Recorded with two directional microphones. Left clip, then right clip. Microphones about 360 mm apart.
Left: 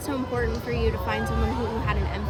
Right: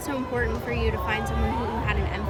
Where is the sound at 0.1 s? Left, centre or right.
Left.